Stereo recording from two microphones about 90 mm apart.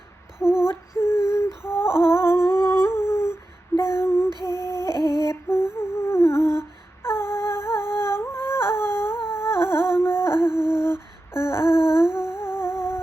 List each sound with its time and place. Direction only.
0.3 s a sound: 10° right (ahead or behind)
0.7 s a sound: 30° left (ahead or behind)
3.8 s female singing: 30° left (ahead or behind)
4.4 s humming: 30° left (ahead or behind)
4.9 s humming: 55° right (ahead or behind)
5.3 s humming: 30° left (ahead or behind)
10.5 s humming: 10° right (ahead or behind)
11.3 s a sound: 30° left (ahead or behind)
12.0 s humming: 5° right (ahead or behind)
12.4 s humming: 30° left (ahead or behind)